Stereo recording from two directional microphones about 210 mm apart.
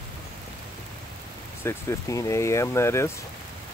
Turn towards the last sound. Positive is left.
turn(degrees=15)  # may be behind; listen again after turning